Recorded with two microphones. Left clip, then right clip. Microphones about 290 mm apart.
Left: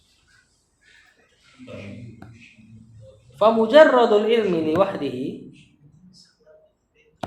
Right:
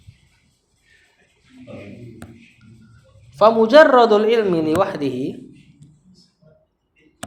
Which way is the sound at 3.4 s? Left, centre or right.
Right.